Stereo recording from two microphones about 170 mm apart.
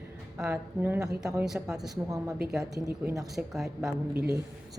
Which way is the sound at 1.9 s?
20° right (ahead or behind).